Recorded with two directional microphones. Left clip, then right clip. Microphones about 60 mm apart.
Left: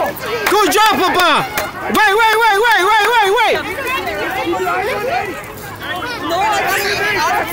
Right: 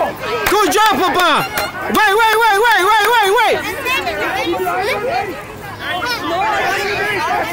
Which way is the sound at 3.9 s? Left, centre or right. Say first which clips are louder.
Right 3 dB; right.